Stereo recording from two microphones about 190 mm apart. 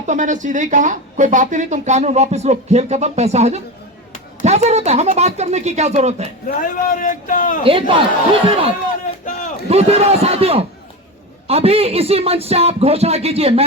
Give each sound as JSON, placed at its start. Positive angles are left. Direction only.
{"t": 0.0, "sound": "speech", "side_deg": -40}
{"t": 6.5, "sound": "a man's voice", "side_deg": 45}
{"t": 7.6, "sound": "speech", "side_deg": -30}
{"t": 9.2, "sound": "a sound", "side_deg": 45}
{"t": 9.6, "sound": "speech", "side_deg": -35}